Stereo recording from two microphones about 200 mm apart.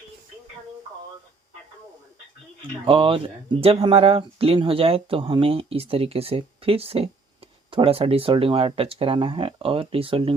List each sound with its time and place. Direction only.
2.6 s speech: 25° right (ahead or behind)